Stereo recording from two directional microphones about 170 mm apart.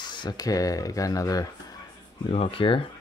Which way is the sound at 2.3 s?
35° left (ahead or behind).